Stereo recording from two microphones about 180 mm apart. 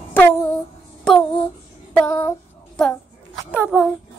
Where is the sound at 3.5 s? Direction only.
5° right (ahead or behind).